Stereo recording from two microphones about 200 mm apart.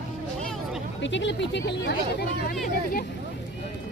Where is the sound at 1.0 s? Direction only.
65° left (ahead or behind).